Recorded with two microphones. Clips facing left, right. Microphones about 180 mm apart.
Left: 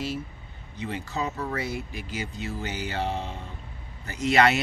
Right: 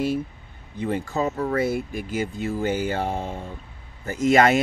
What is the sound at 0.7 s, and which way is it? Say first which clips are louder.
Speech: right 6 dB; 50° right (ahead or behind).